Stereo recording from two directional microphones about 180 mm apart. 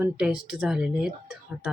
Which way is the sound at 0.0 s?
5° right (ahead or behind).